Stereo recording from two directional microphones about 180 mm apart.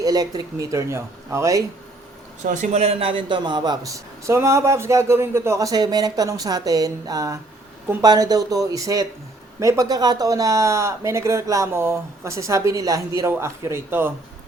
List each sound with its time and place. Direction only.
0.0 s speech: 20° right (ahead or behind)
2.4 s a man's voice: 40° right (ahead or behind); by 14.1 s 15° right (ahead or behind)